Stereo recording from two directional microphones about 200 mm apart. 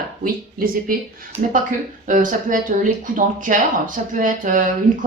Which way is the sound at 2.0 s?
40° right (ahead or behind).